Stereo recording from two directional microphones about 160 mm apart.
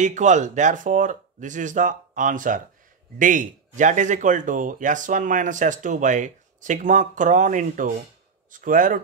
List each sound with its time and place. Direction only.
0.0 s speech: 50° right (ahead or behind)